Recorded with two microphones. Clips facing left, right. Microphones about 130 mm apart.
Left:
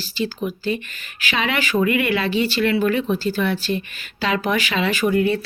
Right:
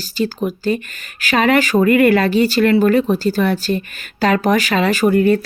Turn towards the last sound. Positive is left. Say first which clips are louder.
# right 5 dB
turn(degrees=-45)  # may be behind; listen again after turning